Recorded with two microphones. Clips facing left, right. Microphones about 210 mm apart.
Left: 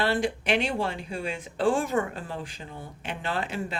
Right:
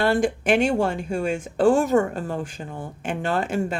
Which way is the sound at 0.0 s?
45° right (ahead or behind).